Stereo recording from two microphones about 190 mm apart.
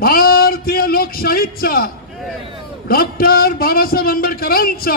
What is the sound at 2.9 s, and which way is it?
A man's voice, 50° left (ahead or behind).